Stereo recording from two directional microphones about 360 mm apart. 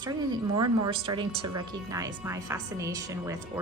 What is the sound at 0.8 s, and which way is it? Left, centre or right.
A woman's voice, centre.